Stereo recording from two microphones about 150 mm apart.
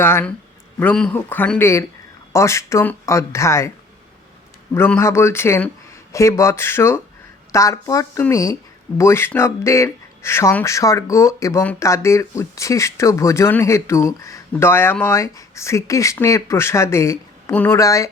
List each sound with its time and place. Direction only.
0.0 s speech: 15° left (ahead or behind)
4.7 s speech: 15° left (ahead or behind)